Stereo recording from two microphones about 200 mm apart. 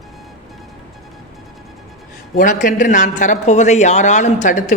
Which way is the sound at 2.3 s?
40° left (ahead or behind).